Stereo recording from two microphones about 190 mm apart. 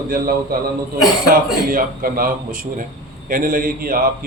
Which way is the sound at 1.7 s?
50° right (ahead or behind).